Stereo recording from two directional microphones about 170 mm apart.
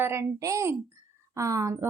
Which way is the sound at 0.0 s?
15° right (ahead or behind).